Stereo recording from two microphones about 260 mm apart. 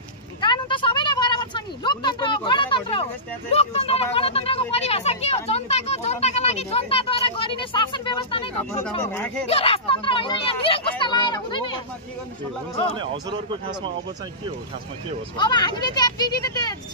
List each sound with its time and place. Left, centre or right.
0.4 s a sound: centre
3.5 s speech: left
9.0 s speech: centre
9.5 s speech: left
12.9 s speech: centre
15.3 s speech: centre